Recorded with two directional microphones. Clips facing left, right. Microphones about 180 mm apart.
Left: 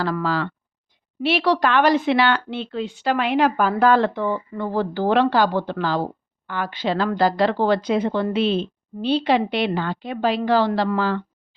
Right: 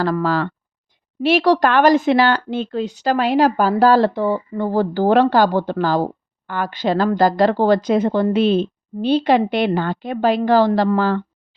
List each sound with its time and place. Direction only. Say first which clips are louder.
0.0 s a woman's voice: right 4 dB; 45° right (ahead or behind)